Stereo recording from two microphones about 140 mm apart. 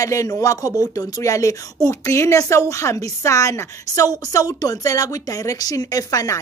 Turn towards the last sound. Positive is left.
turn(degrees=25)  # may be behind; listen again after turning